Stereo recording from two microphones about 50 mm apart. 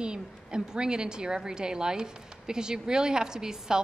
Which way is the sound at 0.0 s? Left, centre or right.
Centre.